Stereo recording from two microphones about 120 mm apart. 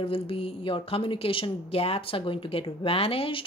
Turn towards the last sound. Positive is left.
turn(degrees=50)  # may be behind; listen again after turning